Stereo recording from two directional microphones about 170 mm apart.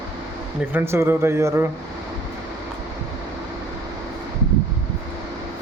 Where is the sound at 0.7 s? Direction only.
15° right (ahead or behind).